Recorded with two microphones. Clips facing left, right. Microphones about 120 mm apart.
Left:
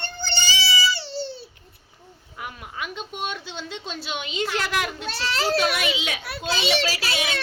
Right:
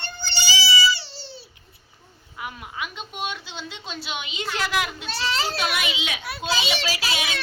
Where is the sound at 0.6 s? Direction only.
55° left (ahead or behind).